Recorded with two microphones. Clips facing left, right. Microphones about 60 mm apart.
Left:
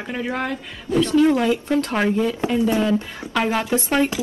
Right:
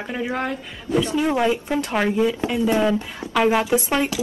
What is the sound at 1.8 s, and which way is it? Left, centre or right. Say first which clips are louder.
Speech: even; centre.